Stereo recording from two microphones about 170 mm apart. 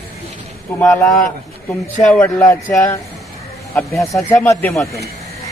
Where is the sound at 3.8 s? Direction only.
Centre (ahead or behind).